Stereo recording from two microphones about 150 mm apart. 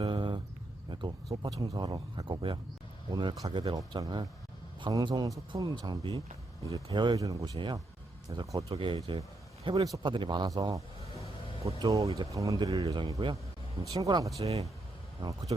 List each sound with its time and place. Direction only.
0.0 s a sound: 35° right (ahead or behind)
1.5 s speech: 25° right (ahead or behind)
7.5 s speech: 35° right (ahead or behind)
9.6 s speech: 25° right (ahead or behind)
14.3 s speech: 45° right (ahead or behind)
15.2 s speech: 25° right (ahead or behind)